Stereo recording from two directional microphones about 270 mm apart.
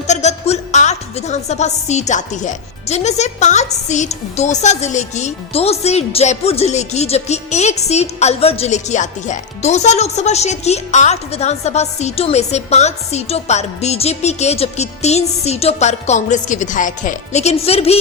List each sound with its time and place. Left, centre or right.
0.1 s music: left